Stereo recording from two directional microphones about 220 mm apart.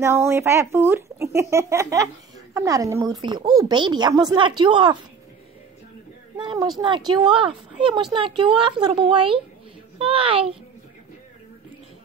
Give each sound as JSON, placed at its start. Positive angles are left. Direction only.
{"t": 0.0, "sound": "speech", "side_deg": -10}
{"t": 6.3, "sound": "speech", "side_deg": -20}